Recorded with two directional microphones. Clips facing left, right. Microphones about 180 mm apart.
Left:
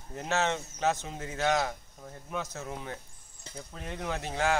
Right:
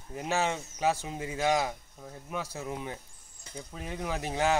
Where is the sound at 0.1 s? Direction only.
10° right (ahead or behind).